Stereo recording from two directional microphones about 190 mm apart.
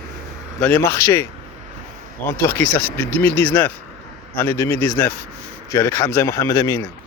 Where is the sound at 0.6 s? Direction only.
10° left (ahead or behind).